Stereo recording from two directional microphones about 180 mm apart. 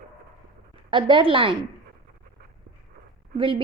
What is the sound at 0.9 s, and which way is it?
Speech, 25° right (ahead or behind).